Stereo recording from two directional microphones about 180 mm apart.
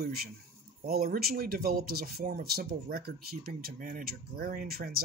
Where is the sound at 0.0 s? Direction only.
60° right (ahead or behind).